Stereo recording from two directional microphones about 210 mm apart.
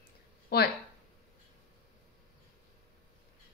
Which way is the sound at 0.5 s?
50° left (ahead or behind).